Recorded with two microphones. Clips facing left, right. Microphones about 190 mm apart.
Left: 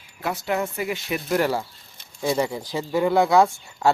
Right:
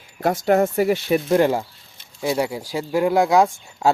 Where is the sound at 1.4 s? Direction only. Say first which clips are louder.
Right 1 dB; 20° right (ahead or behind).